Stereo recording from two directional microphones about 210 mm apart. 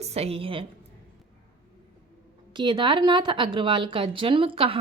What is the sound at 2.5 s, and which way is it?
A woman's voice, 20° right (ahead or behind).